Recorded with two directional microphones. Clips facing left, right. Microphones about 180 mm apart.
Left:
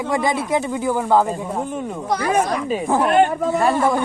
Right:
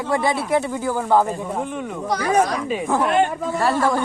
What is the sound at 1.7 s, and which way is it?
Speech, 50° left (ahead or behind).